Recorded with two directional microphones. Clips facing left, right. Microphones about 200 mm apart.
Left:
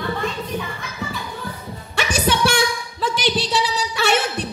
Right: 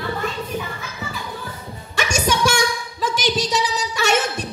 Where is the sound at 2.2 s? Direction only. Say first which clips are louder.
Left 1 dB; 45° right (ahead or behind).